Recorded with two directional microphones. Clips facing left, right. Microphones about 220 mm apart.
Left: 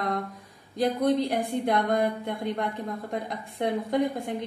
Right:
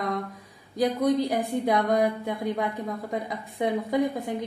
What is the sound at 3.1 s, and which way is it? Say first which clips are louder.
A woman's voice: right 1 dB; centre (ahead or behind).